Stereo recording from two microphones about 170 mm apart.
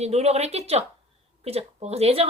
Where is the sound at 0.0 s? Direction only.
40° right (ahead or behind).